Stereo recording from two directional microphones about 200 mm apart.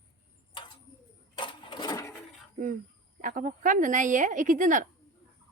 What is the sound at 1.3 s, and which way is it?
Sewing machine, 25° left (ahead or behind).